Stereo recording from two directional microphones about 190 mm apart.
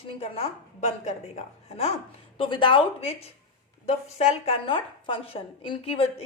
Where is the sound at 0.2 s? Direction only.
30° left (ahead or behind).